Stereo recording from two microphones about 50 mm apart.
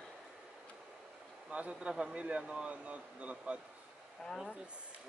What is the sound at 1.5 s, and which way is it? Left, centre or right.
Speech, right.